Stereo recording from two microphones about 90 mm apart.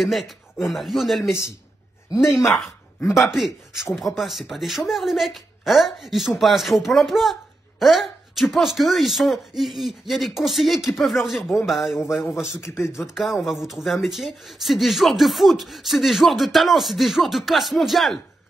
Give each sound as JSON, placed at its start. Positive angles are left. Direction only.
{"t": 0.0, "sound": "speech", "side_deg": 0}
{"t": 2.3, "sound": "speech", "side_deg": 0}
{"t": 12.2, "sound": "a man's voice", "side_deg": 25}
{"t": 13.0, "sound": "speech", "side_deg": -5}